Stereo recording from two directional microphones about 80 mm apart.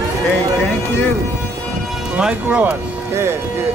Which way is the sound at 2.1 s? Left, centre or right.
Centre.